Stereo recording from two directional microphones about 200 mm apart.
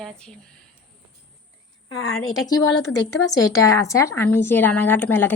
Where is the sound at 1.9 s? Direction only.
90° left.